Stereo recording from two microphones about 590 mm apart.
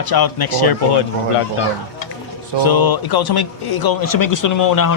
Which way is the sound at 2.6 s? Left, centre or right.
Left.